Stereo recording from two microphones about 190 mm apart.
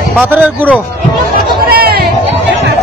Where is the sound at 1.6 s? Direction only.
55° right (ahead or behind).